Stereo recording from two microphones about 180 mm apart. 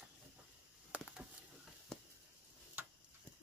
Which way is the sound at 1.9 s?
5° left (ahead or behind).